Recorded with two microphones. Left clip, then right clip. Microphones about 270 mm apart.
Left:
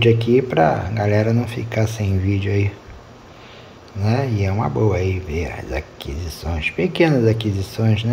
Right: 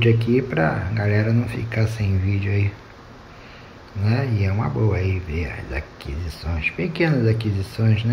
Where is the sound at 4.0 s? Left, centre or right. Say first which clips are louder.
Left 4 dB; centre.